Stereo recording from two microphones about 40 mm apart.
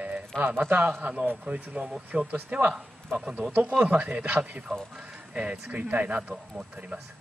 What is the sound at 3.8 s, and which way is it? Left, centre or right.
Speech, right.